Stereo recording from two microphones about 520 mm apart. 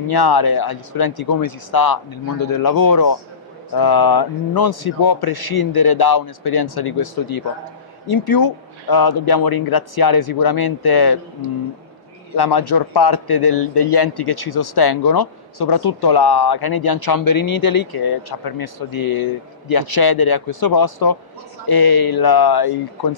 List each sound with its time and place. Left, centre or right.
0.1 s a man's voice: left
12.4 s a man's voice: left